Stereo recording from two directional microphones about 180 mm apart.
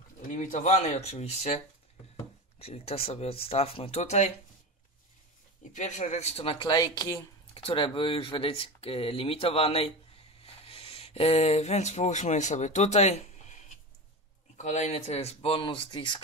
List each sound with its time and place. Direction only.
0.2 s speech: 45° left (ahead or behind)
2.6 s speech: 35° left (ahead or behind)
5.7 s speech: 45° left (ahead or behind); by 16.2 s 25° left (ahead or behind)